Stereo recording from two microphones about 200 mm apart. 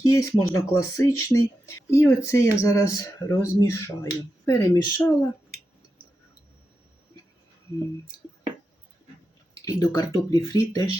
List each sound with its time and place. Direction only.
0.0 s speech: 15° left (ahead or behind)
9.6 s speech: 20° left (ahead or behind)